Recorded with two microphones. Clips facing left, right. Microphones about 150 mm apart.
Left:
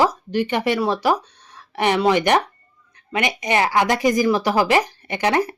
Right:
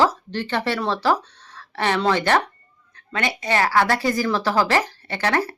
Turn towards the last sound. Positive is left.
turn(degrees=15)  # may be behind; listen again after turning